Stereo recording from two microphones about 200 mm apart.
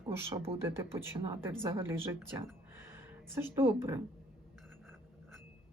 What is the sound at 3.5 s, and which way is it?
Speech, 10° right (ahead or behind).